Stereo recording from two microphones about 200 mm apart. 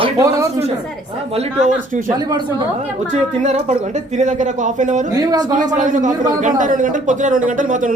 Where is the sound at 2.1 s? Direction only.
20° right (ahead or behind).